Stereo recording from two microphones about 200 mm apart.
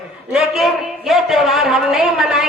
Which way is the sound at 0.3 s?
Centre (ahead or behind).